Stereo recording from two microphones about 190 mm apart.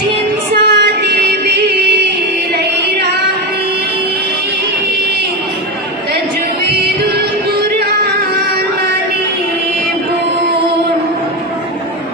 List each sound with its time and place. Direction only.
0.5 s music: 60° right (ahead or behind)